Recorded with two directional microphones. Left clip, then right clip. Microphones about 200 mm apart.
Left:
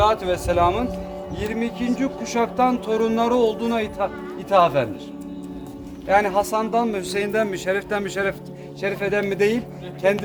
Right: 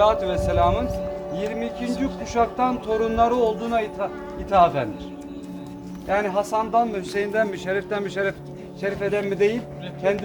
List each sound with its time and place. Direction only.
0.0 s speech: 60° left (ahead or behind)
6.1 s speech: 65° left (ahead or behind)